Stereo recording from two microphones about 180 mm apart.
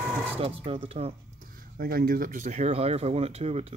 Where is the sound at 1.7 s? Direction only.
55° right (ahead or behind).